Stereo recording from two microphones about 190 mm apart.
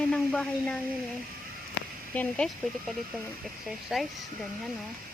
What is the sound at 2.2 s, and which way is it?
Speech, 5° left (ahead or behind).